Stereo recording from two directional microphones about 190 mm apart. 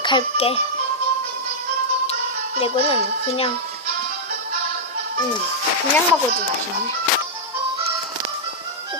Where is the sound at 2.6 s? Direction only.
30° left (ahead or behind).